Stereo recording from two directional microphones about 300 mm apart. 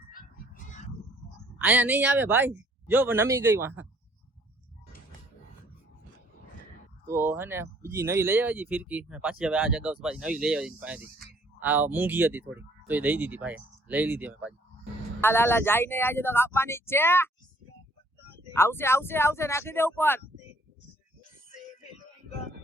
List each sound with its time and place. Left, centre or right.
0.1 s a sound: left
1.5 s speech: centre
7.0 s speech: centre
15.2 s speech: centre
18.5 s speech: centre